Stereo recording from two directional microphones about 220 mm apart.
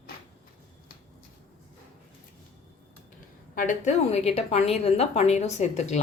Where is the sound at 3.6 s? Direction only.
35° left (ahead or behind).